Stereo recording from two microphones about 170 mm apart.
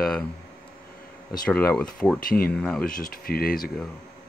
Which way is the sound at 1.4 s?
5° left (ahead or behind).